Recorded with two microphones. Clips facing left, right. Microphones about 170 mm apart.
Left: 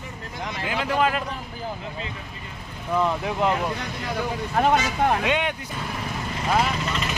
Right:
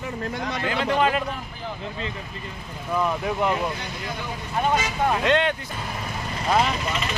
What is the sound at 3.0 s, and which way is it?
Speech, 20° left (ahead or behind).